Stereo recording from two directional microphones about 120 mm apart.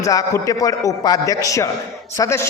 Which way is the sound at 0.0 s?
30° left (ahead or behind).